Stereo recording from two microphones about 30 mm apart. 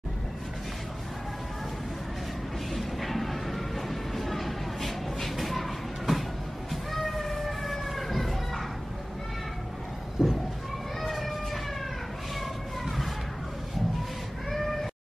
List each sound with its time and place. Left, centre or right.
2.7 s a sound: centre
10.2 s cat: centre
12.8 s music: centre
14.5 s cat: centre